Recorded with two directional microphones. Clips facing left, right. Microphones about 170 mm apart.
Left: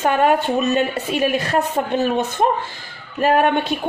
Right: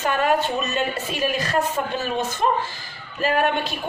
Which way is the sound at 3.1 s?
55° left (ahead or behind).